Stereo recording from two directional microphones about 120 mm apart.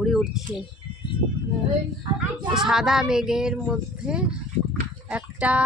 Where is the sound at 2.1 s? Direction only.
5° right (ahead or behind).